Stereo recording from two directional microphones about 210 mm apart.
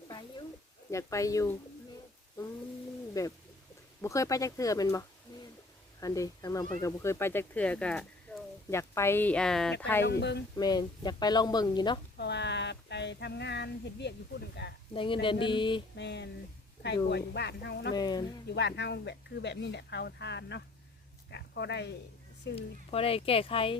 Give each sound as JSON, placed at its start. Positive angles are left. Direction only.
{"t": 0.1, "sound": "a sound", "side_deg": 20}
{"t": 0.9, "sound": "speech", "side_deg": 15}
{"t": 3.2, "sound": "speech", "side_deg": 15}
{"t": 5.3, "sound": "a sound", "side_deg": 20}
{"t": 6.0, "sound": "speech", "side_deg": 15}
{"t": 10.0, "sound": "speech", "side_deg": 55}
{"t": 10.6, "sound": "speech", "side_deg": 20}
{"t": 12.1, "sound": "a sound", "side_deg": 55}
{"t": 14.6, "sound": "speech", "side_deg": 55}
{"t": 14.9, "sound": "speech", "side_deg": 25}
{"t": 16.0, "sound": "speech", "side_deg": 55}
{"t": 17.9, "sound": "speech", "side_deg": 20}
{"t": 18.4, "sound": "speech", "side_deg": 55}
{"t": 22.5, "sound": "speech", "side_deg": 25}